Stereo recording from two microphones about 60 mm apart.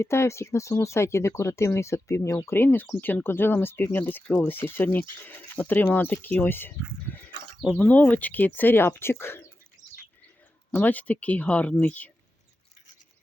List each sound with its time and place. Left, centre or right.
0.0 s speech: left
2.5 s speech: left
7.8 s speech: left
10.7 s speech: left